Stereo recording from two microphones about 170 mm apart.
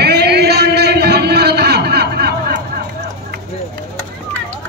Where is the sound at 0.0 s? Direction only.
75° right (ahead or behind).